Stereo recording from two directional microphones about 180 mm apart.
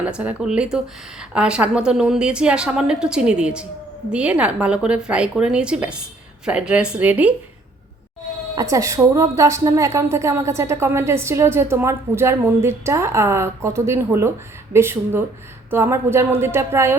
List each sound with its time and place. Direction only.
0.0 s a woman's voice: 10° right (ahead or behind)
8.5 s a woman's voice: 15° right (ahead or behind)